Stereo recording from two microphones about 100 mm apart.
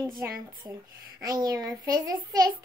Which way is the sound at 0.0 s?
40° right (ahead or behind).